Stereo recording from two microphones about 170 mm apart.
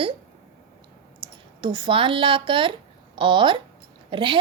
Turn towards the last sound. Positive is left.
turn(degrees=-30)  # may be behind; listen again after turning